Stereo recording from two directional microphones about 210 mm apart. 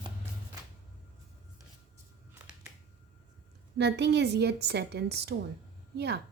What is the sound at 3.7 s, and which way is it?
A woman's voice, 55° right (ahead or behind).